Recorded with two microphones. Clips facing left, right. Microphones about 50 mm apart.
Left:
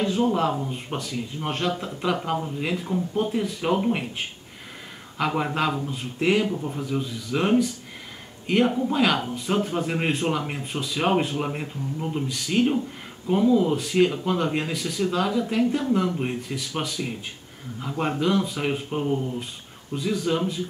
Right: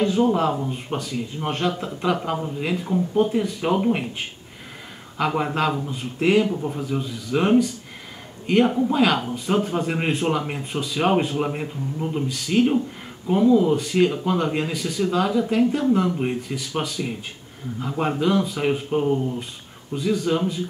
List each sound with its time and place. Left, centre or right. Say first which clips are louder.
0.0 s a man's voice: right 3 dB; centre